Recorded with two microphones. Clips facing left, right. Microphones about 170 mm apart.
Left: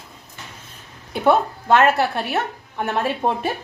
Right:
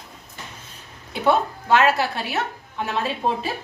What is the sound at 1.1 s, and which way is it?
A woman's voice, 50° left (ahead or behind).